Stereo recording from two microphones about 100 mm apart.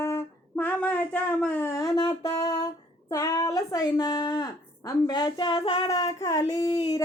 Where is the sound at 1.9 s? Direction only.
40° left (ahead or behind).